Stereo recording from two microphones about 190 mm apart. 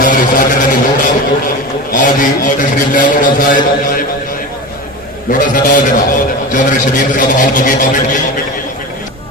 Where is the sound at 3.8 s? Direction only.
50° left (ahead or behind).